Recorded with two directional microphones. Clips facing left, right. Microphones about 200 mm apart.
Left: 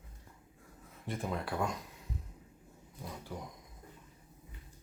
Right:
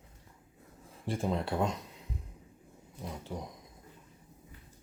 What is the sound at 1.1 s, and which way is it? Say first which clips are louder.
Speech: right 5 dB; 25° right (ahead or behind).